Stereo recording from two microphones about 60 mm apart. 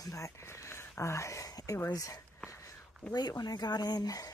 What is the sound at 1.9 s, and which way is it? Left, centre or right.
Speech, left.